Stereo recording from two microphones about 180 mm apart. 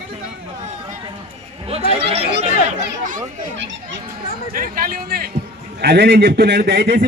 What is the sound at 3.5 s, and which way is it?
Speech, 85° right.